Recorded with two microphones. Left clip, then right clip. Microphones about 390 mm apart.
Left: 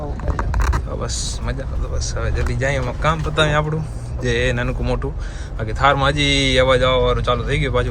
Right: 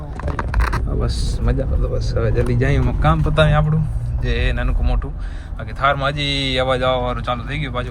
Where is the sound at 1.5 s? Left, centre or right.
Right.